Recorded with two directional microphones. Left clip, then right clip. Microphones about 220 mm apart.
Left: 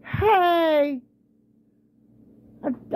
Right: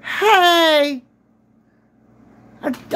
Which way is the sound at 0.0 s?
10° right (ahead or behind).